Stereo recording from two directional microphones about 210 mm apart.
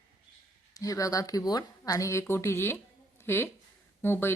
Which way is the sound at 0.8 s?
15° left (ahead or behind).